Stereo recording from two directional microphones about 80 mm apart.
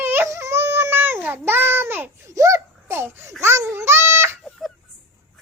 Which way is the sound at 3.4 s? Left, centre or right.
Right.